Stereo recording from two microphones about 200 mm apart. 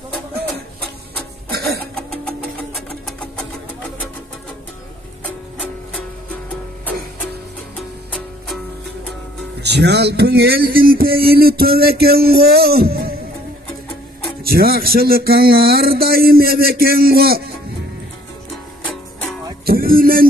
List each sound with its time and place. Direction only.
3.1 s sewing machine: 5° left (ahead or behind)
9.6 s speech: 55° right (ahead or behind)
14.4 s speech: 50° right (ahead or behind)
19.6 s music: 50° right (ahead or behind)